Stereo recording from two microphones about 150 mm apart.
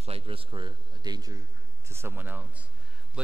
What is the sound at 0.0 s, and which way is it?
A man's voice, 40° right (ahead or behind).